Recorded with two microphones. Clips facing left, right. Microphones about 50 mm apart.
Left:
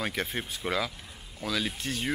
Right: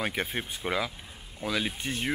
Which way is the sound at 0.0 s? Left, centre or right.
Centre.